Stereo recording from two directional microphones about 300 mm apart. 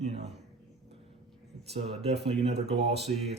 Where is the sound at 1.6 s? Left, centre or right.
Centre.